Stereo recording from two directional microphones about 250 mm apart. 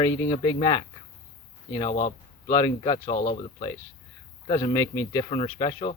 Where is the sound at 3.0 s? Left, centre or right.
Left.